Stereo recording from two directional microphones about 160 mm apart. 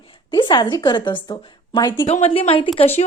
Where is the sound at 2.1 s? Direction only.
40° left (ahead or behind).